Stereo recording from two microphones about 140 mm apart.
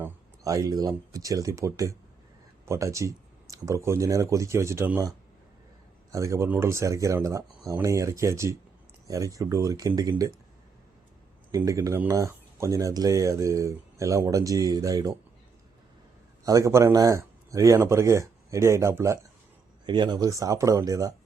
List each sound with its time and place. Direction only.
0.0 s speech: 25° right (ahead or behind)
11.5 s speech: 25° right (ahead or behind)
16.4 s speech: 25° right (ahead or behind)
19.8 s speech: 30° right (ahead or behind)